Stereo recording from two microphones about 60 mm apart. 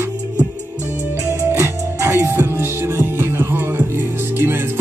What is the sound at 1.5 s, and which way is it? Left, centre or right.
Music, right.